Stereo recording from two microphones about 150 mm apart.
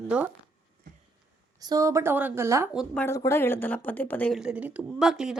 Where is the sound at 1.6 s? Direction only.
25° right (ahead or behind).